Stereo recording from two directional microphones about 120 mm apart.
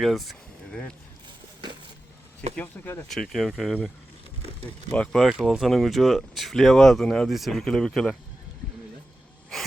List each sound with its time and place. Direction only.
0.0 s speech: centre (ahead or behind)
2.6 s speech: 15° left (ahead or behind)
3.1 s speech: 5° left (ahead or behind)
4.9 s speech: 10° left (ahead or behind)
5.2 s speech: centre (ahead or behind)
9.5 s sneeze: 5° left (ahead or behind)